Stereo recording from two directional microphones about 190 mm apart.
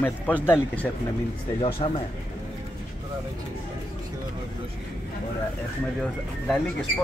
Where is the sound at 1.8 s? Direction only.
35° left (ahead or behind).